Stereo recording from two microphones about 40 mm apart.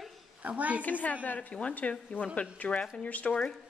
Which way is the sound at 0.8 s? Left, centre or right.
Left.